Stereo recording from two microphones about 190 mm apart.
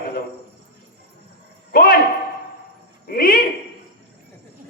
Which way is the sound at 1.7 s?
50° left (ahead or behind).